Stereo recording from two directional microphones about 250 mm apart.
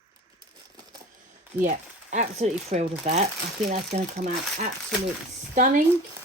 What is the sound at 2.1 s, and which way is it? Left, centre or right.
Speech, right.